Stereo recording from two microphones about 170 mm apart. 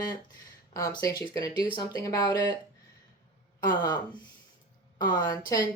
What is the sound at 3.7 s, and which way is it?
A woman's voice, 25° left (ahead or behind).